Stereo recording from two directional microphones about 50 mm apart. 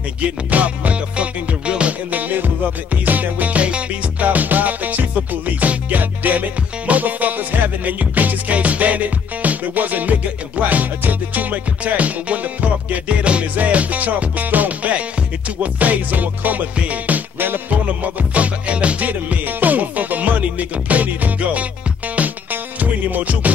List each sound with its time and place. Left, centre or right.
0.5 s music: right